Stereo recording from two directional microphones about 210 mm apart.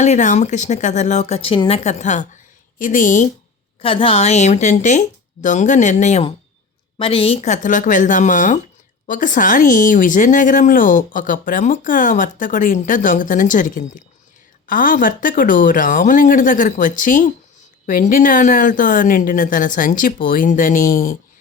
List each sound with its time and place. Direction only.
0.0 s speech: 35° left (ahead or behind)
3.8 s speech: 25° left (ahead or behind)